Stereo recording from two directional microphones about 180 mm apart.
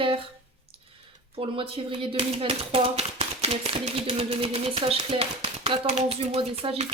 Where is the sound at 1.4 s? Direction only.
30° right (ahead or behind).